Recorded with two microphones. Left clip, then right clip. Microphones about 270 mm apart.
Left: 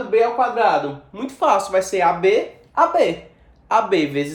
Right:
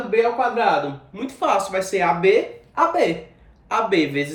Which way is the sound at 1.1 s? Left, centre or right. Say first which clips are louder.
Left 3 dB; centre.